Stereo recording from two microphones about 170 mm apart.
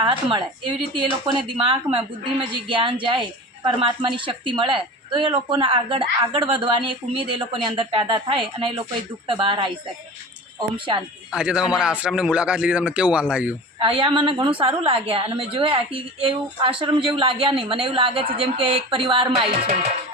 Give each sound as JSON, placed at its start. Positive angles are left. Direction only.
{"t": 0.0, "sound": "a woman's voice", "side_deg": -30}
{"t": 11.3, "sound": "speech", "side_deg": -5}
{"t": 13.7, "sound": "a woman's voice", "side_deg": -30}